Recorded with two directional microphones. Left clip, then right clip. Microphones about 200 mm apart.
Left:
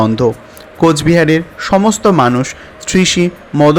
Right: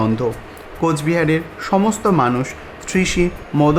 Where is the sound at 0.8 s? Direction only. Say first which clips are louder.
Left 8 dB; 20° left (ahead or behind).